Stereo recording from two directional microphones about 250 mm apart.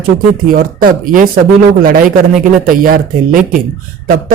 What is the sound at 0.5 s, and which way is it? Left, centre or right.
Speech, right.